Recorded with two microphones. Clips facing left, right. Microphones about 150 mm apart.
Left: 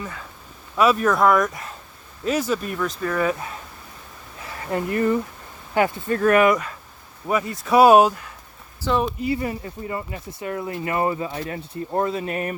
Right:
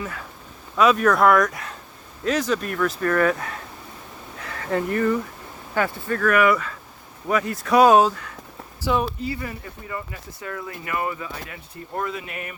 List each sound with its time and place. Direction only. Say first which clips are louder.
0.8 s speech: right 1 dB; 5° left (ahead or behind)
4.4 s speech: right 1 dB; 15° left (ahead or behind)
7.3 s speech: even; 5° left (ahead or behind)
8.8 s speech: left 1 dB; 5° right (ahead or behind)
9.2 s speech: left 5 dB; 25° left (ahead or behind)